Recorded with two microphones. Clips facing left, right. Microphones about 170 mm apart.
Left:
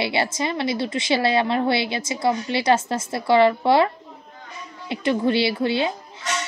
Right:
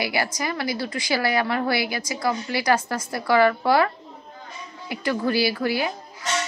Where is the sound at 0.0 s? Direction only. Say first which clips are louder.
Left 3 dB; 25° left (ahead or behind).